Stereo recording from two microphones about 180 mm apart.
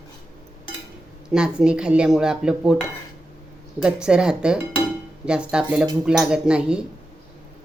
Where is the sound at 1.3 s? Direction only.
5° right (ahead or behind).